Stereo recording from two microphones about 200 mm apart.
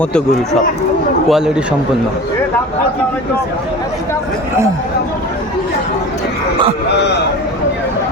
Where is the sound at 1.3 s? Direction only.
5° right (ahead or behind).